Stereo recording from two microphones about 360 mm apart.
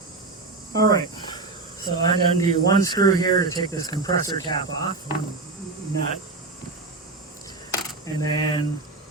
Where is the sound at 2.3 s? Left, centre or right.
Centre.